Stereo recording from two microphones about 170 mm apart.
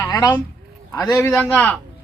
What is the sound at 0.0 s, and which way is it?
Speech, 20° left (ahead or behind).